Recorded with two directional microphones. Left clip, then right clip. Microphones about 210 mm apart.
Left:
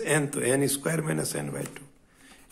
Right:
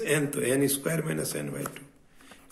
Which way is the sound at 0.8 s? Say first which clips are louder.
Left 1 dB; 40° left (ahead or behind).